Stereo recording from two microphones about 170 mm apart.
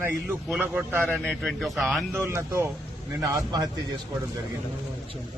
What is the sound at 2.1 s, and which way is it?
Speech, 15° right (ahead or behind).